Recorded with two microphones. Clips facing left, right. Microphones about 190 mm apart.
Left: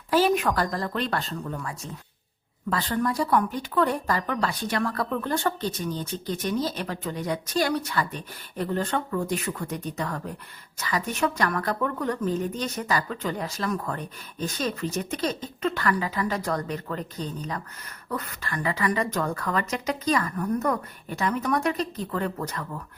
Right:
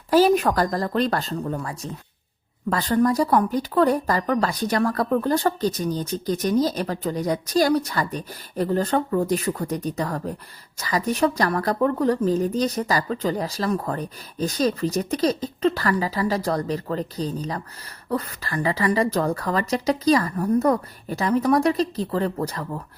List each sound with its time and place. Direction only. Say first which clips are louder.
0.1 s speech: right 5 dB; 40° right (ahead or behind)